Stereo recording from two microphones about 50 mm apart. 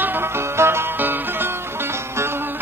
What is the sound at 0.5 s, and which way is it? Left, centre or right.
Music, right.